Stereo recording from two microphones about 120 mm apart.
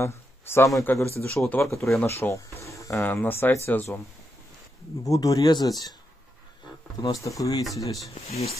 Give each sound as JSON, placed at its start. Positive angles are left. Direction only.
{"t": 0.0, "sound": "a sound", "side_deg": 20}
{"t": 0.8, "sound": "speech", "side_deg": 20}
{"t": 1.3, "sound": "speech", "side_deg": 5}
{"t": 1.6, "sound": "speech", "side_deg": 25}
{"t": 5.0, "sound": "speech", "side_deg": 30}
{"t": 7.0, "sound": "speech", "side_deg": 30}
{"t": 8.1, "sound": "speech", "side_deg": 60}